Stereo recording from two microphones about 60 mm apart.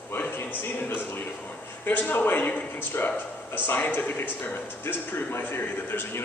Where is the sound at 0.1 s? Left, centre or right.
Left.